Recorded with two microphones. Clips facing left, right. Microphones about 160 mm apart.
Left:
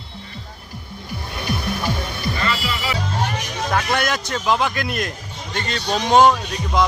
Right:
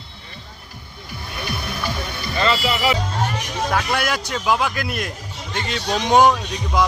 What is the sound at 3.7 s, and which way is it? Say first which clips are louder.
A man's voice: left 2 dB; 5° right (ahead or behind).